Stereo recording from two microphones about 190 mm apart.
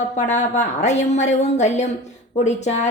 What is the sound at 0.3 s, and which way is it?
A woman's voice, 40° left (ahead or behind).